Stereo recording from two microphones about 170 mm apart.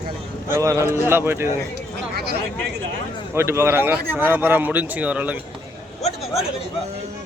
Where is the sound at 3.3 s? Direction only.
15° right (ahead or behind).